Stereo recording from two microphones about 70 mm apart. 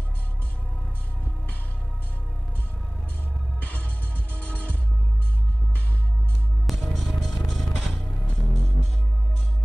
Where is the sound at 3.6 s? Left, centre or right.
Left.